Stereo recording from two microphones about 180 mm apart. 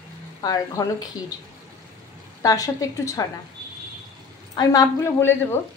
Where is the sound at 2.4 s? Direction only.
20° left (ahead or behind).